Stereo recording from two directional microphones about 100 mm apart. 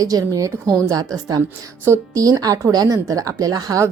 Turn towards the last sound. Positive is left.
turn(degrees=-40)  # may be behind; listen again after turning